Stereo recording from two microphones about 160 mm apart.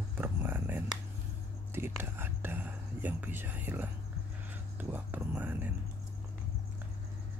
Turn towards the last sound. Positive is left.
turn(degrees=-10)  # may be behind; listen again after turning